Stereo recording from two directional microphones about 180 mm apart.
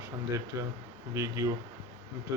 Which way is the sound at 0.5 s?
15° right (ahead or behind).